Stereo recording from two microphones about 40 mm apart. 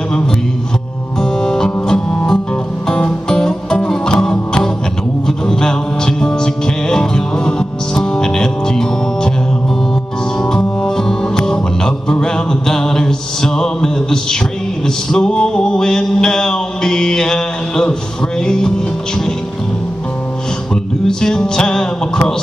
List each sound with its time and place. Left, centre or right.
1.2 s music: centre
10.4 s music: centre
14.9 s a sound: centre
18.4 s music: centre
20.7 s music: centre